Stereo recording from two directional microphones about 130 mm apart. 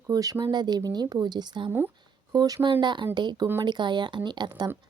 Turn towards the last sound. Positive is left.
turn(degrees=-35)  # may be behind; listen again after turning